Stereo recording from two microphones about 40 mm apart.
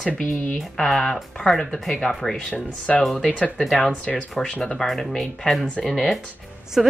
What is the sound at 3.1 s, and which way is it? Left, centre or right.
Speech, left.